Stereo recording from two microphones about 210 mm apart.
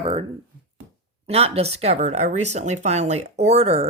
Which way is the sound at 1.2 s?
30° right (ahead or behind).